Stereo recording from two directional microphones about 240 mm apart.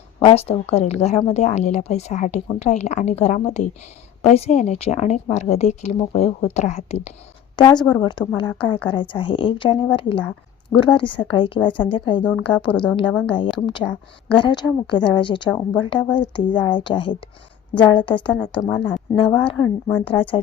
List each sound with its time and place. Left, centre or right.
0.2 s a woman's voice: left
12.7 s speech: centre
13.3 s a woman's voice: centre
16.0 s speech: centre
16.3 s a woman's voice: centre
20.1 s a woman's voice: left